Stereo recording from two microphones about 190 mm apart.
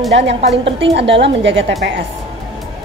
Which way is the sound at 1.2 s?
70° right (ahead or behind).